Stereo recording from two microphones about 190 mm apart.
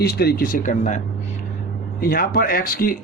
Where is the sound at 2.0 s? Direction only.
50° left (ahead or behind).